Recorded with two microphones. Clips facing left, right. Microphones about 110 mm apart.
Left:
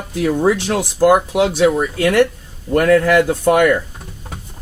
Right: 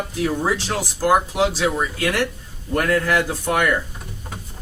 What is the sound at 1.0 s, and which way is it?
Speech, 60° left (ahead or behind).